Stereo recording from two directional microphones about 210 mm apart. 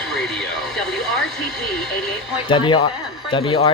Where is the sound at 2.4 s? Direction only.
20° left (ahead or behind).